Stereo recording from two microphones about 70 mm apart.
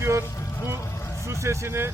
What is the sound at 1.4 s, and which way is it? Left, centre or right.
Speech, right.